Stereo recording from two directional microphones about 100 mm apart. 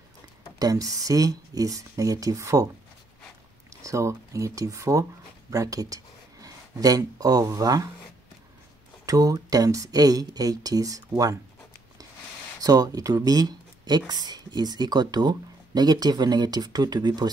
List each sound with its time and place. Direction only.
0.6 s speech: 35° right (ahead or behind)
3.7 s speech: 30° right (ahead or behind)
9.0 s speech: 35° right (ahead or behind)
12.5 s speech: 35° right (ahead or behind)